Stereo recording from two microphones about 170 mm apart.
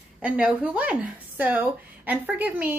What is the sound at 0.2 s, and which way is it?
Speech, 10° right (ahead or behind).